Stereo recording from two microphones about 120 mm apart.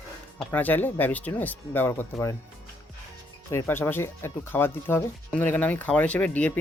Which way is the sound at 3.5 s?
20° left (ahead or behind).